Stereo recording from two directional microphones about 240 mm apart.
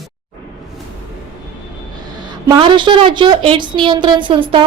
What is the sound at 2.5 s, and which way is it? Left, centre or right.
A woman's voice, centre.